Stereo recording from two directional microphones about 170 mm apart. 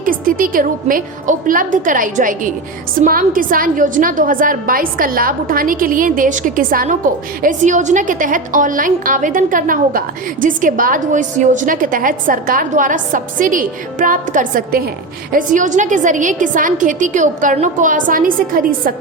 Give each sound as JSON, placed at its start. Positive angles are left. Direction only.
{"t": 0.0, "sound": "a woman's voice", "side_deg": -55}